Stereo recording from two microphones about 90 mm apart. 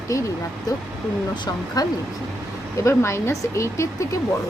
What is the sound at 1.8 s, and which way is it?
Speech, 45° left (ahead or behind).